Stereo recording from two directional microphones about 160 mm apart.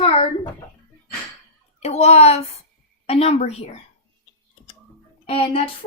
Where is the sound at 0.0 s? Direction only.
40° left (ahead or behind).